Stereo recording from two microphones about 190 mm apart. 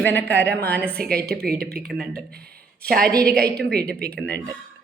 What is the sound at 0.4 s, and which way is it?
A woman's voice, 55° right (ahead or behind).